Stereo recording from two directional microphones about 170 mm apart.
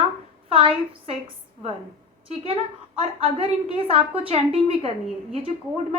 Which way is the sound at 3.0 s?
35° right (ahead or behind).